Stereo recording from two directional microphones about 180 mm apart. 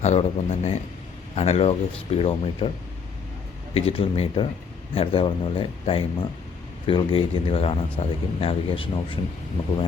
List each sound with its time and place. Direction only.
0.0 s speech: 35° left (ahead or behind)
3.8 s speech: 30° left (ahead or behind)